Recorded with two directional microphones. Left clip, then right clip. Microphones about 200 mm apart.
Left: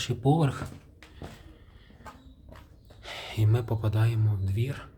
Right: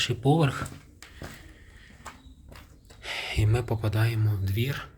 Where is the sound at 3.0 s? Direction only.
5° left (ahead or behind); by 4.9 s 10° right (ahead or behind).